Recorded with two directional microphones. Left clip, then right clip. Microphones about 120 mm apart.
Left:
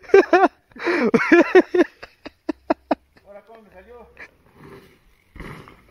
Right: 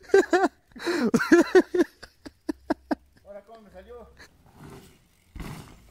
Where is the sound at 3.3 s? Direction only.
35° right (ahead or behind).